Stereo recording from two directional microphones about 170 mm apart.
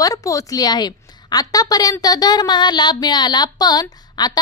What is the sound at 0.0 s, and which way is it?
A woman's voice, 20° left (ahead or behind).